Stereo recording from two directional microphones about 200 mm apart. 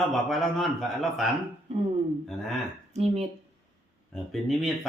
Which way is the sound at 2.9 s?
30° right (ahead or behind).